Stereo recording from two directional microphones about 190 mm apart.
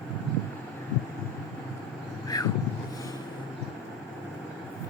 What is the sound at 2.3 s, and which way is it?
Vehicle, 20° left (ahead or behind).